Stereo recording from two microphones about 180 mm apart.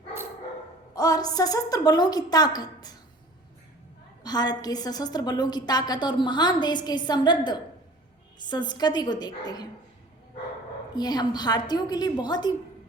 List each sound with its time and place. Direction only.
0.9 s a woman's voice: 20° left (ahead or behind)
4.2 s a woman's voice: 20° left (ahead or behind)
10.9 s a woman's voice: 25° left (ahead or behind)